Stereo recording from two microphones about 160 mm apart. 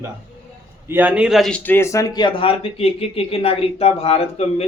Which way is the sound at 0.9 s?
10° right (ahead or behind).